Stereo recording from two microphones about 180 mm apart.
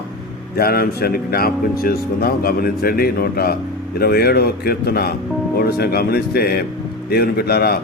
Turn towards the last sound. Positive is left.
turn(degrees=60)  # may be behind; listen again after turning